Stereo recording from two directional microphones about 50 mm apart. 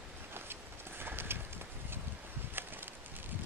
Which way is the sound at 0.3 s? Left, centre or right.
Right.